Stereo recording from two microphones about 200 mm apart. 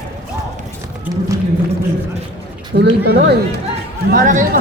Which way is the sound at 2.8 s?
55° right (ahead or behind).